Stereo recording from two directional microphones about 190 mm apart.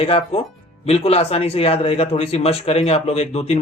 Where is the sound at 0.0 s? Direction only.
30° left (ahead or behind).